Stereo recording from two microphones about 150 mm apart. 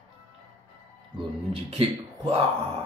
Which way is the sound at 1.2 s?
40° right (ahead or behind).